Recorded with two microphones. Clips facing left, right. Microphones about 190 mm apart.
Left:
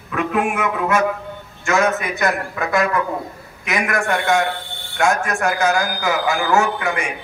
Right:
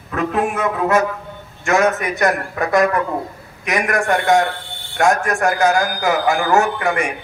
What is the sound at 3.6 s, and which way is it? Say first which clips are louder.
A man's voice: right 2 dB; 40° right (ahead or behind).